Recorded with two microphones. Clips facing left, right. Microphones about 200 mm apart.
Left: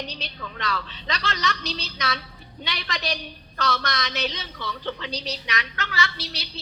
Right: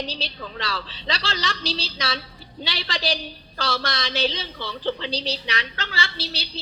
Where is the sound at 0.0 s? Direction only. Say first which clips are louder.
Right 3 dB; 30° right (ahead or behind).